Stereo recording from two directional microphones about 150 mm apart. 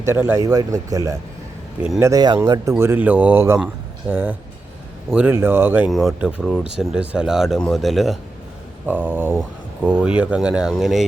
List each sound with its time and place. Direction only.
0.0 s speech: 15° right (ahead or behind)
5.9 s speech: centre (ahead or behind)
8.9 s speech: 10° right (ahead or behind)